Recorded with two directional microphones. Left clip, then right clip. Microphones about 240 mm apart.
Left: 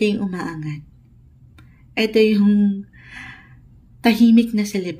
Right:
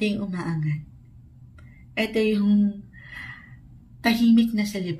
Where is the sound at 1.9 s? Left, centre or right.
Left.